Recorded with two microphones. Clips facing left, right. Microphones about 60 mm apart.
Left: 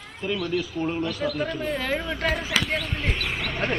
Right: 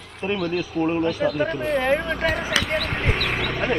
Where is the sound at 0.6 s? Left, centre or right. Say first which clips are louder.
Right 5 dB; right.